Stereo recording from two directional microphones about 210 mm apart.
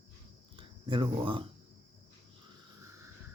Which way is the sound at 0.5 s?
25° right (ahead or behind).